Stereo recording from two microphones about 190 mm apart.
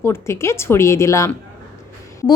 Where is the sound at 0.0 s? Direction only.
15° left (ahead or behind).